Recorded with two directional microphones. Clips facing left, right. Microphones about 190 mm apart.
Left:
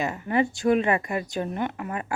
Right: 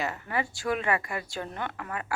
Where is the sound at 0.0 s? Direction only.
25° left (ahead or behind).